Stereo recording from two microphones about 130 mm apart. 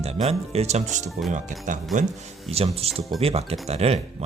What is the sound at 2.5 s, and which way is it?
Speech, 50° right (ahead or behind).